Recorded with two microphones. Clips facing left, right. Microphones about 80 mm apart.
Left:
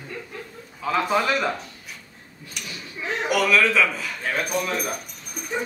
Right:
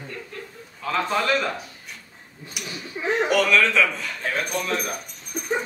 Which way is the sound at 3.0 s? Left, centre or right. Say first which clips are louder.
Right 5 dB; right.